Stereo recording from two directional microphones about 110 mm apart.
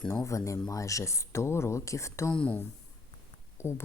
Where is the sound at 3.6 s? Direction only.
25° left (ahead or behind).